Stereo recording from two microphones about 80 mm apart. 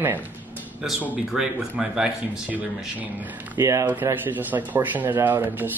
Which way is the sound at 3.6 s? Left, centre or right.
Right.